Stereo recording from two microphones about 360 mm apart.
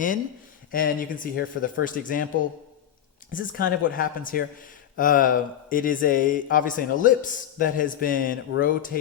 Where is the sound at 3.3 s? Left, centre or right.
Left.